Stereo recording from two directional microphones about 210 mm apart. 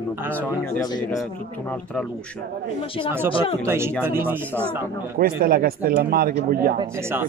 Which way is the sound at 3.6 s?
10° right (ahead or behind).